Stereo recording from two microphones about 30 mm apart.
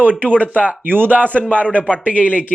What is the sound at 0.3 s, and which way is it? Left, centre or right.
Speech, left.